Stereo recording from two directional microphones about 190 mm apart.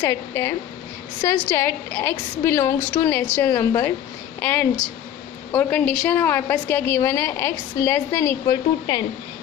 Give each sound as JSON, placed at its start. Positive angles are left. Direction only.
{"t": 0.0, "sound": "a woman's voice", "side_deg": 15}